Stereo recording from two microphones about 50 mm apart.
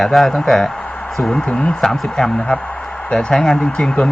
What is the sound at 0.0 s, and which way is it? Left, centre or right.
Speech, centre.